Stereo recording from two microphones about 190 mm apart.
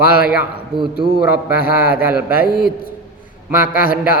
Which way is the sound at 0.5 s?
25° right (ahead or behind).